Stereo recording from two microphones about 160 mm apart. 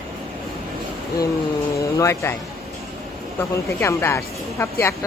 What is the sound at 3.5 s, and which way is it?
A woman's voice, 15° left (ahead or behind).